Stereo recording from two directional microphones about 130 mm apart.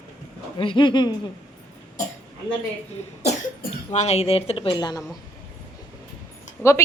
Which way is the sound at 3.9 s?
55° left (ahead or behind).